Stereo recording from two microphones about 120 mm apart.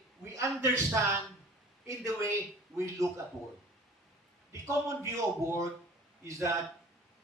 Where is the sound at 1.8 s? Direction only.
25° right (ahead or behind).